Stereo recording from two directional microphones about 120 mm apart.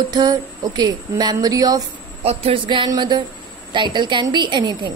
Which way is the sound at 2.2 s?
55° right (ahead or behind).